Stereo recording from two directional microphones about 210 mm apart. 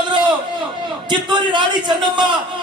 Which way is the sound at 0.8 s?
20° right (ahead or behind).